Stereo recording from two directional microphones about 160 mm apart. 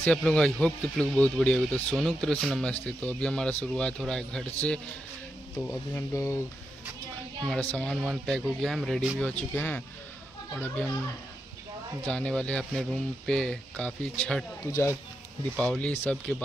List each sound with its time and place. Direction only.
0.0 s speech: 10° left (ahead or behind)
7.7 s speech: 5° left (ahead or behind)
12.1 s speech: 5° left (ahead or behind)
14.6 s speech: 20° left (ahead or behind)
15.5 s speech: 5° left (ahead or behind)